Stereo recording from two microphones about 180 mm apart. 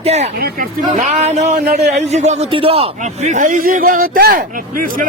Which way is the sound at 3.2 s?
45° right (ahead or behind).